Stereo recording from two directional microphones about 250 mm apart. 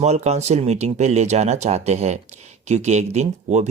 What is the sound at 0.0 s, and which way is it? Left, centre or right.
Speech, right.